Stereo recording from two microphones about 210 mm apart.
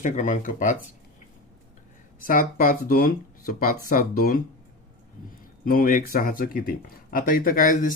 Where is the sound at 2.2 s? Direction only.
40° left (ahead or behind).